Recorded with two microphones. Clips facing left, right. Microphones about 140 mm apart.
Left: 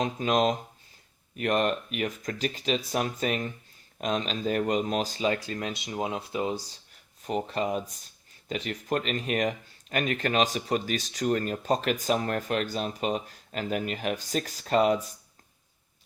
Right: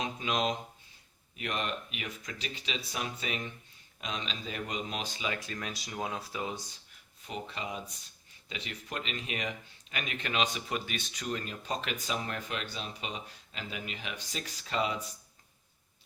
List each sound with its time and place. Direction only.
0.0 s speech: 45° left (ahead or behind)
7.3 s speech: 45° left (ahead or behind)